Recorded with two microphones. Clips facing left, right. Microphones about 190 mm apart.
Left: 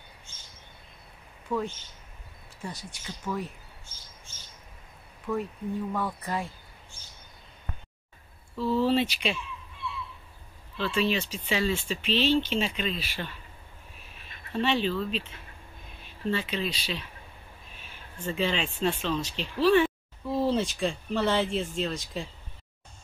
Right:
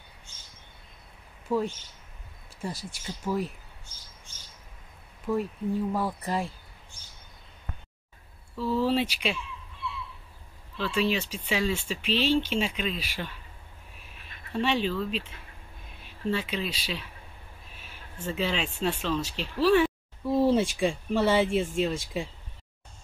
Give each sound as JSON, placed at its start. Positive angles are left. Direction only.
{"t": 1.5, "sound": "speech", "side_deg": -10}
{"t": 2.6, "sound": "speech", "side_deg": -30}
{"t": 5.3, "sound": "speech", "side_deg": -10}
{"t": 5.9, "sound": "speech", "side_deg": -30}
{"t": 8.5, "sound": "speech", "side_deg": -10}
{"t": 10.8, "sound": "speech", "side_deg": -10}
{"t": 14.5, "sound": "speech", "side_deg": -10}